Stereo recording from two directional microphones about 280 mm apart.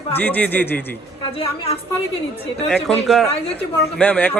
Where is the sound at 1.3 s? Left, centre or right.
Centre.